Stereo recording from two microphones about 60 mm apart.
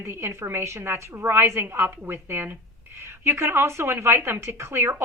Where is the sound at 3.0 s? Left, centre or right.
Right.